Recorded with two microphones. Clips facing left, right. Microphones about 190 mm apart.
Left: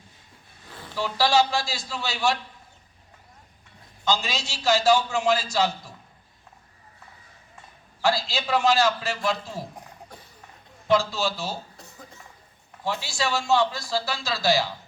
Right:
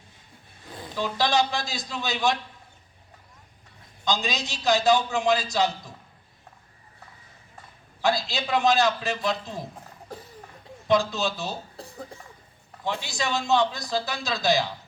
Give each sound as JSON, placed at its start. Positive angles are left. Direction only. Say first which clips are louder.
{"t": 0.7, "sound": "speech", "louder": "even", "side_deg": -15}
{"t": 4.0, "sound": "speech", "louder": "left 1 dB", "side_deg": -15}
{"t": 8.0, "sound": "speech", "louder": "left 1 dB", "side_deg": -20}
{"t": 10.8, "sound": "a man's voice", "louder": "even", "side_deg": -20}
{"t": 12.8, "sound": "speech", "louder": "left 1 dB", "side_deg": -20}